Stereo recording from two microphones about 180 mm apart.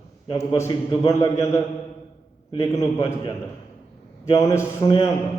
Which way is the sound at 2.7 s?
15° left (ahead or behind).